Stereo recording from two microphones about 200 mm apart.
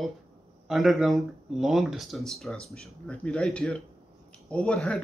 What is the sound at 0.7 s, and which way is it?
Speech, centre (ahead or behind).